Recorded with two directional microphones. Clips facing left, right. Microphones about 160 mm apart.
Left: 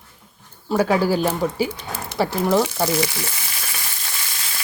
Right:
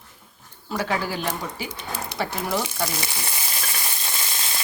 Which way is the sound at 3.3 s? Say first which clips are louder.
Right 1 dB; 20° right (ahead or behind).